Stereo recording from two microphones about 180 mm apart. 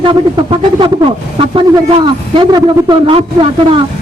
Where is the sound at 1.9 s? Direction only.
25° right (ahead or behind).